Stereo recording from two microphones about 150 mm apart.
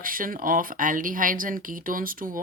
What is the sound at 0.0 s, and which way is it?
Speech, 70° right (ahead or behind).